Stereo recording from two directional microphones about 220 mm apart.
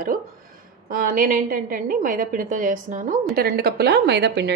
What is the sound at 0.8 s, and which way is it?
A woman's voice, 40° right (ahead or behind).